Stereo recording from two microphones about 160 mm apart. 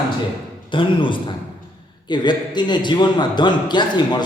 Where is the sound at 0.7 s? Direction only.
30° left (ahead or behind).